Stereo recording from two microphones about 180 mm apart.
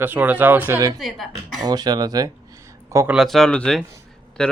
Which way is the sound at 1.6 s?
25° right (ahead or behind).